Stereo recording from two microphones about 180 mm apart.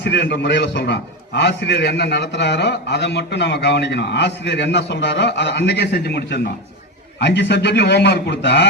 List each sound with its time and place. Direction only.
0.0 s a man's voice: 75° left (ahead or behind)